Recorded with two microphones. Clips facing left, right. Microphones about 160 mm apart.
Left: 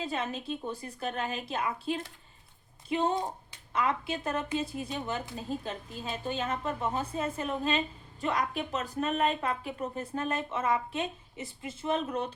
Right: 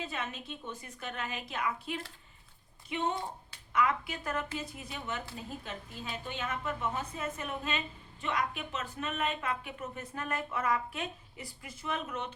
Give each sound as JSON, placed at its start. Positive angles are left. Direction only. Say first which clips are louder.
{"t": 0.0, "sound": "a woman's voice", "louder": "left 5 dB", "side_deg": 35}